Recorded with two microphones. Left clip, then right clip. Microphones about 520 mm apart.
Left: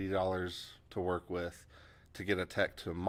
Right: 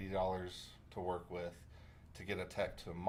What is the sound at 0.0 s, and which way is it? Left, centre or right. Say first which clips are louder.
Speech: left 5 dB; left.